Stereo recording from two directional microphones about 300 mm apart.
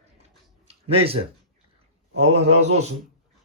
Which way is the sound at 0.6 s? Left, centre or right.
Centre.